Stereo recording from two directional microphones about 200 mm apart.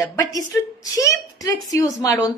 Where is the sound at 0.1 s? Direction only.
20° left (ahead or behind).